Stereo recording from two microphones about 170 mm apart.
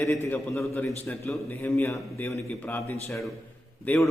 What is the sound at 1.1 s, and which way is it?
A man's voice, 10° left (ahead or behind).